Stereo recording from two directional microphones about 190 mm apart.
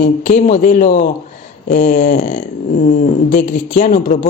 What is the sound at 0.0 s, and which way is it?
Speech, 45° left (ahead or behind).